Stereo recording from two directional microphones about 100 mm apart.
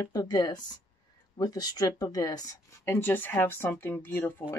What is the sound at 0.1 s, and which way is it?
Speech, 40° left (ahead or behind).